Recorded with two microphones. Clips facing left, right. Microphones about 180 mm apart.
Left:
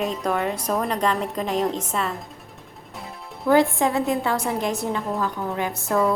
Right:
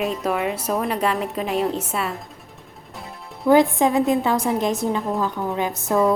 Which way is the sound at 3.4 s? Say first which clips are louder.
Right 3 dB; 20° right (ahead or behind).